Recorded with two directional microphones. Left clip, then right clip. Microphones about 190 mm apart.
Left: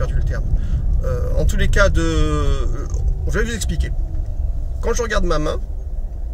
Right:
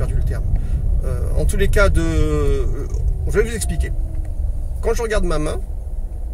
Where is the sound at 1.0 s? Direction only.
15° left (ahead or behind).